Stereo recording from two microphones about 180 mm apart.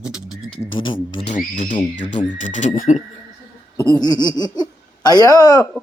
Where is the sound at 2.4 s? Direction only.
45° left (ahead or behind).